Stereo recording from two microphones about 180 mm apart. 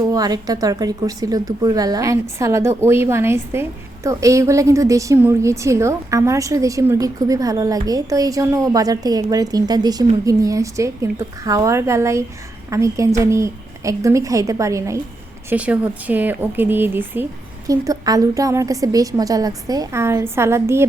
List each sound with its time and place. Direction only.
0.1 s a woman's voice: 20° right (ahead or behind)